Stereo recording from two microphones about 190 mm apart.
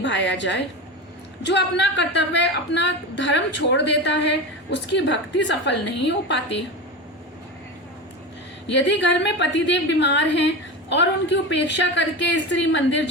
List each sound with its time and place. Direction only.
0.0 s a woman's voice: 70° left (ahead or behind)
8.6 s a woman's voice: 70° left (ahead or behind)